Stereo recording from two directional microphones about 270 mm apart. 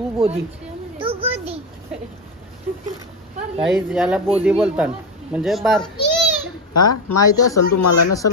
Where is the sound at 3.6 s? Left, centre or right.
Centre.